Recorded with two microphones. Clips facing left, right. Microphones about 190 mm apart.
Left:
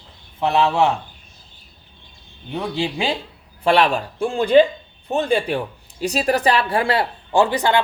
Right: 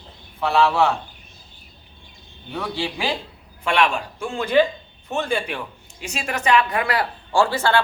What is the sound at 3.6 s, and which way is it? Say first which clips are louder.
A man's voice: left 4 dB; 35° left (ahead or behind).